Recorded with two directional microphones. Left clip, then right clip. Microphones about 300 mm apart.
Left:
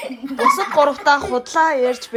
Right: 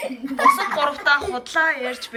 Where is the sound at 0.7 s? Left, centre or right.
Centre.